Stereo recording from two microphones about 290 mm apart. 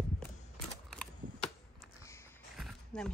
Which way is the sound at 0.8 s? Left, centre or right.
Centre.